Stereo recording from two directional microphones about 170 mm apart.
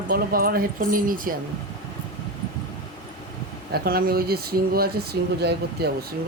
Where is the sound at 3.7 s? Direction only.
65° right (ahead or behind).